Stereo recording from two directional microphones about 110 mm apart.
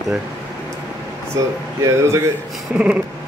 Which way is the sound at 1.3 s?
25° right (ahead or behind).